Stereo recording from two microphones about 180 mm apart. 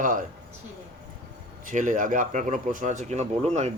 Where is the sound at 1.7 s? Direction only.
45° right (ahead or behind).